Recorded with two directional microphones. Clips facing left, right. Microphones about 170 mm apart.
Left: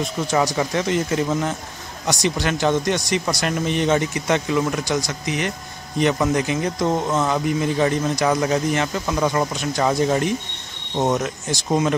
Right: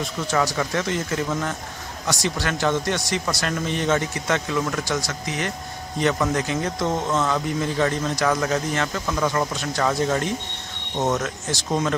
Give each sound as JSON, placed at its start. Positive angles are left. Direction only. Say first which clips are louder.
{"t": 0.3, "sound": "speech", "louder": "left 2 dB", "side_deg": 20}